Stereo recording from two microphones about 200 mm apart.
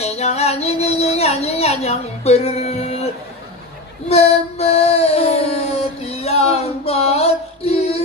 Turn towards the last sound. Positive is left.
turn(degrees=30)  # may be behind; listen again after turning